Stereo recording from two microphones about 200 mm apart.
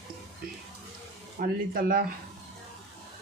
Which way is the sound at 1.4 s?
45° right (ahead or behind).